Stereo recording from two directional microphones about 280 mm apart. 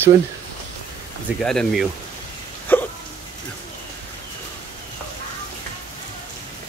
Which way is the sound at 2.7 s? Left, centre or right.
Centre.